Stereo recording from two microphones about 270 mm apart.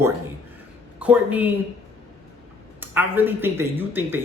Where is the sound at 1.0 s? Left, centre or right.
Centre.